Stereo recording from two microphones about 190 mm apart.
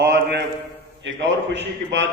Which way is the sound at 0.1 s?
60° right (ahead or behind).